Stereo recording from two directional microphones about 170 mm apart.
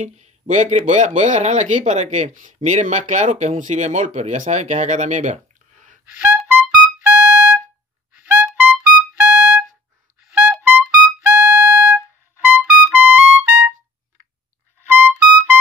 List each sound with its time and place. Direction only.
0.0 s speech: 40° right (ahead or behind)
6.1 s music: 5° right (ahead or behind)
12.4 s trumpet: 10° right (ahead or behind)
15.0 s music: 10° right (ahead or behind)